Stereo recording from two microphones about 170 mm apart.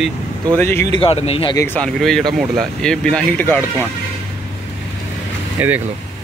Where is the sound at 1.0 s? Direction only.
35° left (ahead or behind).